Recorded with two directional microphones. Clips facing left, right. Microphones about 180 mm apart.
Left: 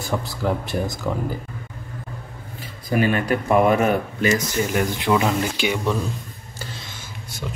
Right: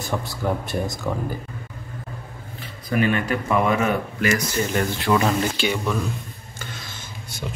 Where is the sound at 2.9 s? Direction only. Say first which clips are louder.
Left 1 dB; 40° left (ahead or behind).